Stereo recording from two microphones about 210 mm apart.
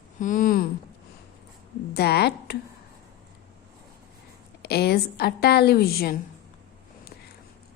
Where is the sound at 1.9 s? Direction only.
50° left (ahead or behind).